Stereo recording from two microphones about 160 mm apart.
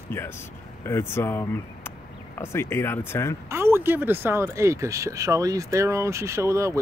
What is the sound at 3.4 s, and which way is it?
Speech, 15° right (ahead or behind).